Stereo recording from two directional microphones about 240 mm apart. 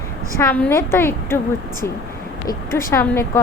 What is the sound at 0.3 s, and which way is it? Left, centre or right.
A woman's voice, centre.